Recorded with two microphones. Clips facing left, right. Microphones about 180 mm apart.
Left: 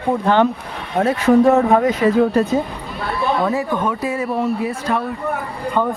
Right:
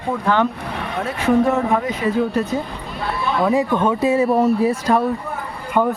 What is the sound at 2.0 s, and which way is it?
Speech, 65° left (ahead or behind).